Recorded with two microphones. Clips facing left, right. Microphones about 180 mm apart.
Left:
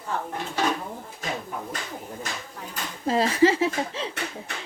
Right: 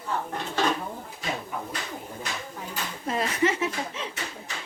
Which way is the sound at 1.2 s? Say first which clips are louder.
Left 1 dB; 45° left (ahead or behind).